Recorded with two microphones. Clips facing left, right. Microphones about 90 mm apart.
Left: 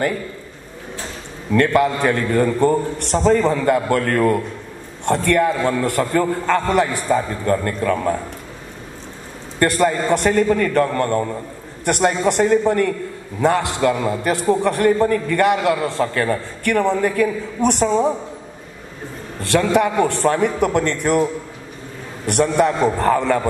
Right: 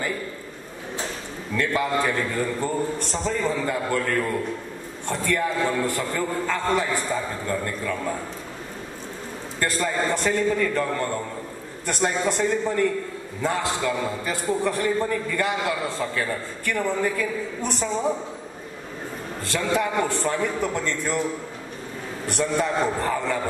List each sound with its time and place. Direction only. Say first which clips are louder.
1.5 s a man's voice: left 8 dB; 65° left (ahead or behind)
9.6 s a man's voice: left 8 dB; 60° left (ahead or behind)
19.4 s a man's voice: left 8 dB; 65° left (ahead or behind)
22.2 s a man's voice: left 8 dB; 65° left (ahead or behind)